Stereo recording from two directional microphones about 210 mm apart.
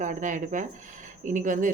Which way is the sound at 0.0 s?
35° right (ahead or behind).